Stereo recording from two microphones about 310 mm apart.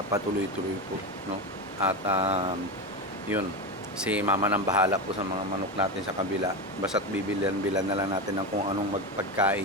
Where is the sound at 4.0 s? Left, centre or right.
Centre.